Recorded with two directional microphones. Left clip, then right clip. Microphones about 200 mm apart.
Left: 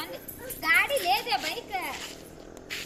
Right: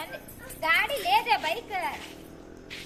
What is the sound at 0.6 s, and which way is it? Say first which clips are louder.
A child's voice: left 1 dB; 25° right (ahead or behind).